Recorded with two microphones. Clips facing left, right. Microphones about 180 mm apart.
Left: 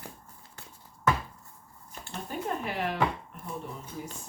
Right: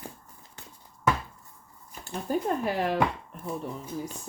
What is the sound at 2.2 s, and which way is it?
Speech, 40° right (ahead or behind).